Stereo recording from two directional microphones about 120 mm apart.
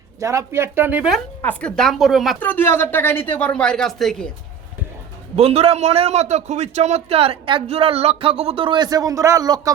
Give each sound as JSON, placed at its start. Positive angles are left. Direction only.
{"t": 0.2, "sound": "speech", "side_deg": -25}
{"t": 1.4, "sound": "a woman's voice", "side_deg": 10}
{"t": 2.4, "sound": "speech", "side_deg": 15}
{"t": 5.4, "sound": "a man's voice", "side_deg": -55}